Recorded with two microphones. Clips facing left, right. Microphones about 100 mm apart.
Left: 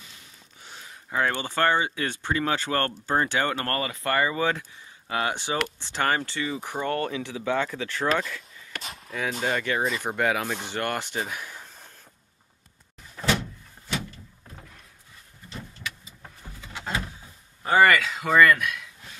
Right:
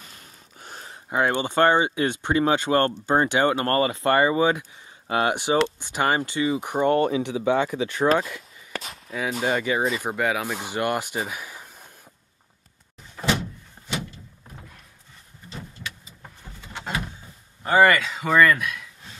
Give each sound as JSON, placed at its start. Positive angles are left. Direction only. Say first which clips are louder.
{"t": 0.0, "sound": "a sound", "louder": "right 3 dB", "side_deg": -45}
{"t": 1.1, "sound": "speech", "louder": "right 4 dB", "side_deg": -20}
{"t": 5.0, "sound": "speech", "louder": "right 5 dB", "side_deg": -30}
{"t": 5.3, "sound": "speech", "louder": "right 7 dB", "side_deg": -20}
{"t": 8.8, "sound": "speech", "louder": "right 1 dB", "side_deg": 0}
{"t": 17.6, "sound": "speech", "louder": "right 1 dB", "side_deg": 0}